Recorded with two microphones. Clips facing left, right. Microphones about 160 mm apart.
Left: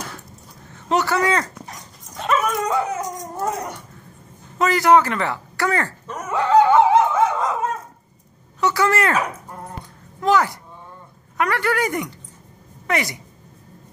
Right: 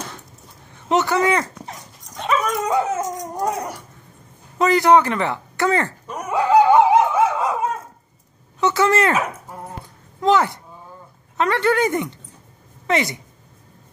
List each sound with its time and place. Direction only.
0.8 s speech: 20° right (ahead or behind)
2.1 s dog: centre (ahead or behind)
2.7 s speech: 20° right (ahead or behind)
8.5 s speech: 20° right (ahead or behind)
10.2 s speech: 20° right (ahead or behind)